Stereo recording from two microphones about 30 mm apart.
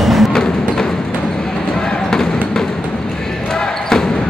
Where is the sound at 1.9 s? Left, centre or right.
Centre.